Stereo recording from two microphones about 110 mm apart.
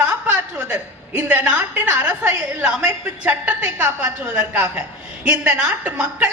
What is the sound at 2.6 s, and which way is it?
A woman's voice, 5° right (ahead or behind).